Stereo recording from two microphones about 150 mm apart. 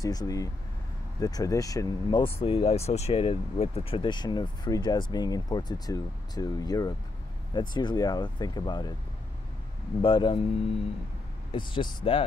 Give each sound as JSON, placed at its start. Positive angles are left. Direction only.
{"t": 0.0, "sound": "speech", "side_deg": 25}
{"t": 2.4, "sound": "speech", "side_deg": 40}
{"t": 10.0, "sound": "speech", "side_deg": 35}
{"t": 11.5, "sound": "speech", "side_deg": 30}